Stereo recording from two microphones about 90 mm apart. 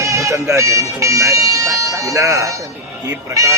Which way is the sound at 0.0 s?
35° right (ahead or behind).